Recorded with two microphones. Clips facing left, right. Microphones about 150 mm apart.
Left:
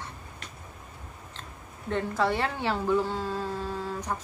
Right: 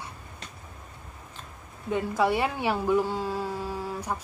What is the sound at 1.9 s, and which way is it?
A woman's voice, 10° right (ahead or behind).